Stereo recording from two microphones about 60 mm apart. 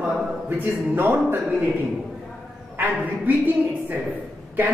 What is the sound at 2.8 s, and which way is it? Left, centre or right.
A woman's voice, right.